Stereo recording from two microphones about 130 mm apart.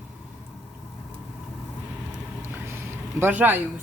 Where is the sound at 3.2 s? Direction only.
15° right (ahead or behind).